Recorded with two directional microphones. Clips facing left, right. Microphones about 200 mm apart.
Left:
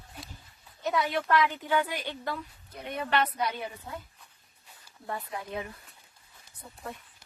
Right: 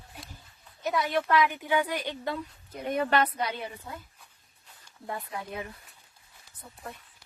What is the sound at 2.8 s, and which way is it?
Speech, 40° right (ahead or behind).